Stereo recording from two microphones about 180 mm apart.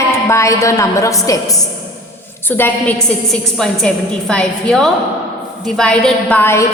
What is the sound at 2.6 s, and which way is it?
A woman's voice, 10° left (ahead or behind).